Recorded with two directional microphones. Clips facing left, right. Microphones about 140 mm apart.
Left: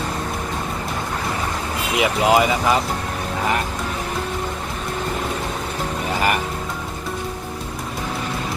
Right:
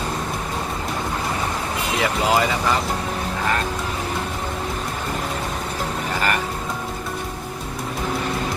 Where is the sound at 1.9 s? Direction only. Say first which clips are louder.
Left 4 dB; 20° left (ahead or behind).